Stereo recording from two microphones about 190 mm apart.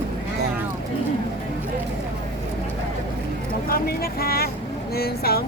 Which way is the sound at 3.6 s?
50° left (ahead or behind).